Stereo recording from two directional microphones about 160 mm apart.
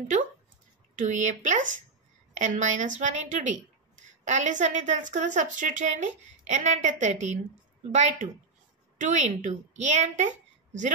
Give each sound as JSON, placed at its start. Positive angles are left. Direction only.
{"t": 0.9, "sound": "a woman's voice", "side_deg": -50}